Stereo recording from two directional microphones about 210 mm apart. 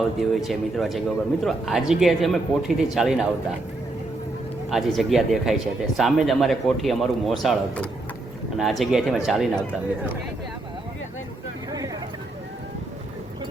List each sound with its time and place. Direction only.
0.2 s speech: centre (ahead or behind)
4.7 s speech: centre (ahead or behind)